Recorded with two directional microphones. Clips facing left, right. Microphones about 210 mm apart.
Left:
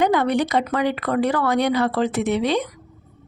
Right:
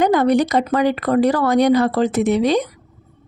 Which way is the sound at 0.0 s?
40° right (ahead or behind).